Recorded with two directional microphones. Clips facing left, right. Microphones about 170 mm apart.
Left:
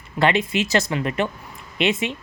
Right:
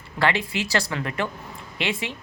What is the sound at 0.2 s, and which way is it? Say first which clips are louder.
Speech: left 4 dB; 20° left (ahead or behind).